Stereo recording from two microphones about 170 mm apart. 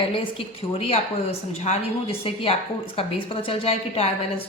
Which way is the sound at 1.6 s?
35° left (ahead or behind).